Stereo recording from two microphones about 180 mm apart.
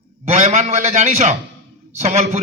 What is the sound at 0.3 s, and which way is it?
A man's voice, 40° right (ahead or behind).